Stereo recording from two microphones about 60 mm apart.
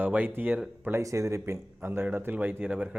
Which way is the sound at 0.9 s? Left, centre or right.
Right.